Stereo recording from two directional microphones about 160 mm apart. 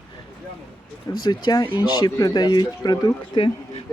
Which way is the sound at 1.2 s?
25° left (ahead or behind).